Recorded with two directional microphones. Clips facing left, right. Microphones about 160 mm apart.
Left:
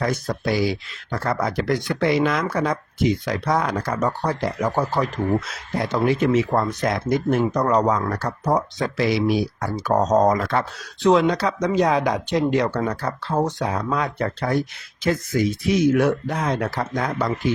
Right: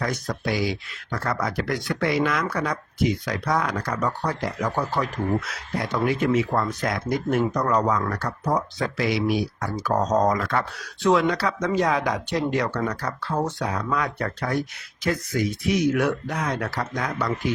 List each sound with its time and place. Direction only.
0.0 s speech: 30° left (ahead or behind)